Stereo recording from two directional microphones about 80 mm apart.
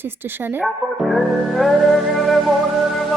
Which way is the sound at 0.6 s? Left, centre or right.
Centre.